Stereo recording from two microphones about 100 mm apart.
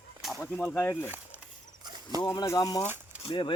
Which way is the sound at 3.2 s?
55° left (ahead or behind).